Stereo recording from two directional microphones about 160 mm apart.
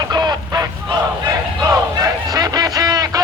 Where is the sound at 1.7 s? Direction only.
25° right (ahead or behind).